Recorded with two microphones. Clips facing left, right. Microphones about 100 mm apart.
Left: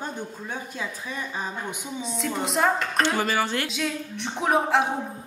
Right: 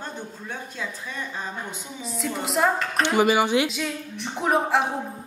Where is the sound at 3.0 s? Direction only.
15° right (ahead or behind).